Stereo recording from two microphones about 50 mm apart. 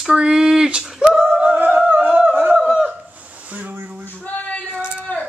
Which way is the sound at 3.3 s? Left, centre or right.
Right.